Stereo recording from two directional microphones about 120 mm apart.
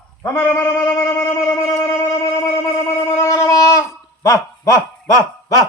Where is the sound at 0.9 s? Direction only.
20° left (ahead or behind).